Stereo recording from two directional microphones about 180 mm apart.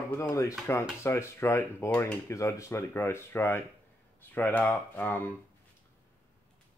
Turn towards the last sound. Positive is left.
turn(degrees=10)  # may be behind; listen again after turning